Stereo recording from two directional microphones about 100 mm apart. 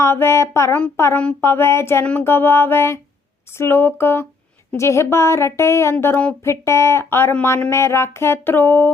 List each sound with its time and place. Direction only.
0.0 s speech: 25° left (ahead or behind)
1.1 s a sound: 10° left (ahead or behind)
1.4 s speech: 25° left (ahead or behind)